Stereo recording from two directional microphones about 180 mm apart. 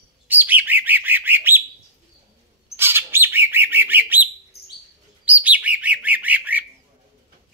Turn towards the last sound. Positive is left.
turn(degrees=-10)  # may be behind; listen again after turning